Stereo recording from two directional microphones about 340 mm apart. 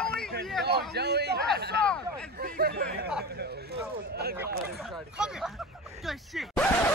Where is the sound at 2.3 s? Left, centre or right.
Right.